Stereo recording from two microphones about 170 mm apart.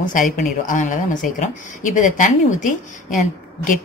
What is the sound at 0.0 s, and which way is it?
Speech, 50° left (ahead or behind).